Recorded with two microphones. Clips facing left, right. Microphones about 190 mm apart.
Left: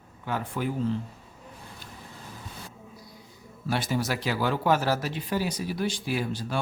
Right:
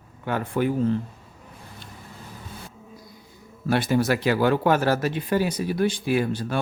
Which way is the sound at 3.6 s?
55° right (ahead or behind).